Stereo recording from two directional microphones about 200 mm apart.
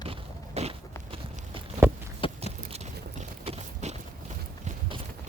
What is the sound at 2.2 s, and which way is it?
Biting, 25° left (ahead or behind).